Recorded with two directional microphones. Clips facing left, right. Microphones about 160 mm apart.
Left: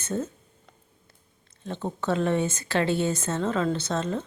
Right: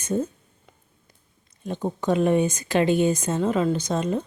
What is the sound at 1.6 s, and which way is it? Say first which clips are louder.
Speech: right 4 dB; 15° right (ahead or behind).